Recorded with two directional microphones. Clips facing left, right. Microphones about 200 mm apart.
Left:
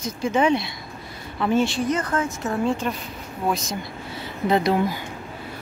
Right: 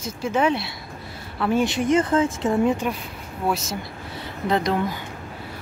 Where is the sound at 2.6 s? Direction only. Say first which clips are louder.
Right 2 dB; 10° right (ahead or behind).